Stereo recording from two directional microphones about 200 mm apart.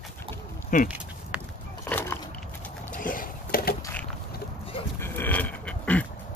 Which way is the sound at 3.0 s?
45° left (ahead or behind).